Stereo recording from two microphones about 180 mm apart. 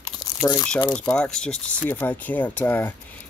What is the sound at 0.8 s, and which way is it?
Speech, 5° left (ahead or behind).